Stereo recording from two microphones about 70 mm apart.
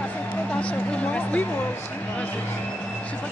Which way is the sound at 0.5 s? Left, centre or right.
Centre.